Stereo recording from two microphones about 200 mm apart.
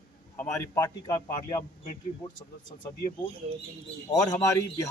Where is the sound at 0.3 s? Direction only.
15° left (ahead or behind).